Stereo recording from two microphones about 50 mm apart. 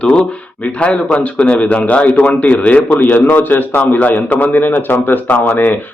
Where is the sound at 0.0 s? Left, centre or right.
Left.